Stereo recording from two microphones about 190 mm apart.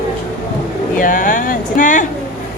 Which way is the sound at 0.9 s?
45° left (ahead or behind).